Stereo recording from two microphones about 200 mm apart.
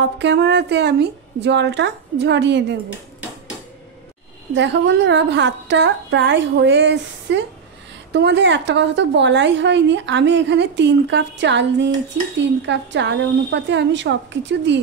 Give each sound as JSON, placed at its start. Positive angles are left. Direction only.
{"t": 0.0, "sound": "a woman's voice", "side_deg": -60}
{"t": 4.6, "sound": "a woman's voice", "side_deg": -60}